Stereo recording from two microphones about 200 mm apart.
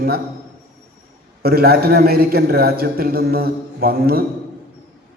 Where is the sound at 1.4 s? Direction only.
50° right (ahead or behind).